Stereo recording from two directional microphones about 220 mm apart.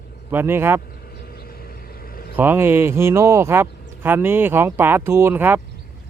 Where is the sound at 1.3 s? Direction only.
40° left (ahead or behind).